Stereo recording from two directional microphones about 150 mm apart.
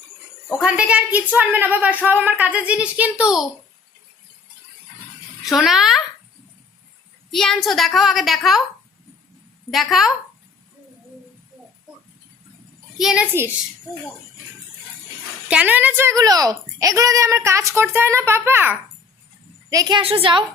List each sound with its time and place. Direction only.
0.6 s a woman's voice: 5° right (ahead or behind)
5.5 s a woman's voice: centre (ahead or behind)
7.3 s a woman's voice: 5° left (ahead or behind)
9.7 s a woman's voice: centre (ahead or behind)
13.0 s a woman's voice: 5° right (ahead or behind)
15.4 s a woman's voice: 10° right (ahead or behind)
19.7 s a woman's voice: 25° right (ahead or behind)
20.0 s a woman's voice: 35° right (ahead or behind)